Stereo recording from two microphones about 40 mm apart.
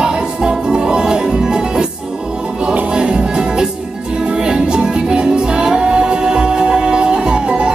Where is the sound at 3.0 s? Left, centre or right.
Right.